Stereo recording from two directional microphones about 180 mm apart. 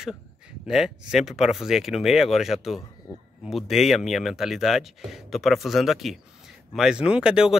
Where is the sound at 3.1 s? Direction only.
20° left (ahead or behind).